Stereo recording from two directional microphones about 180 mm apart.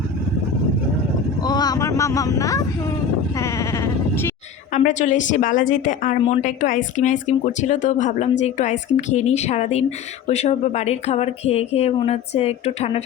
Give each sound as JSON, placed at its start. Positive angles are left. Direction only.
{"t": 1.4, "sound": "speech", "side_deg": 20}
{"t": 4.8, "sound": "a woman's voice", "side_deg": 45}